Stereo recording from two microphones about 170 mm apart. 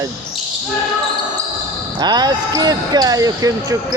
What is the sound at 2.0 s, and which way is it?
Speech, 25° right (ahead or behind).